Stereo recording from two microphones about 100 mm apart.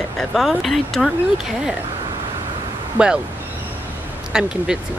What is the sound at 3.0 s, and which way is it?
Speech, 15° right (ahead or behind).